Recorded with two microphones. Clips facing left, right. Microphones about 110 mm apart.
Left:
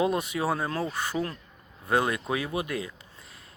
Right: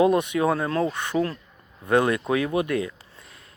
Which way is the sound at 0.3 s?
30° left (ahead or behind).